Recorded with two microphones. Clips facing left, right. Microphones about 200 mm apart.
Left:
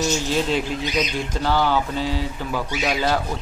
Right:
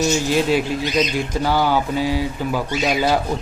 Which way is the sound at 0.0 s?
10° right (ahead or behind).